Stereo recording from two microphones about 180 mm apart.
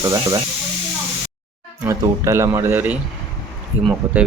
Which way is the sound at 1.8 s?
15° right (ahead or behind).